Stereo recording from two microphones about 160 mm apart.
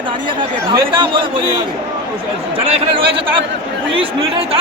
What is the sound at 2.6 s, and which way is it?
Speech, 35° right (ahead or behind).